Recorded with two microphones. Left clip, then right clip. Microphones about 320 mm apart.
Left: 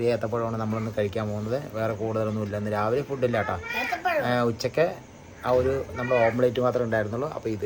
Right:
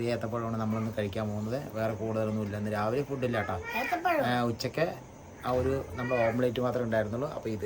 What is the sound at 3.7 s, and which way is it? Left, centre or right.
Speech, centre.